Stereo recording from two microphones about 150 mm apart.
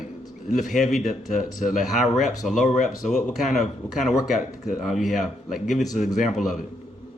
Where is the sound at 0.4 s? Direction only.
60° left (ahead or behind).